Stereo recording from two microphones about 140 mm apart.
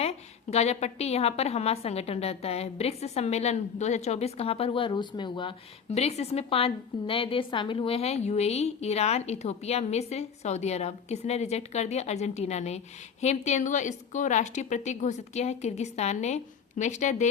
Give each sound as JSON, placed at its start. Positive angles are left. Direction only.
{"t": 0.0, "sound": "a woman's voice", "side_deg": 50}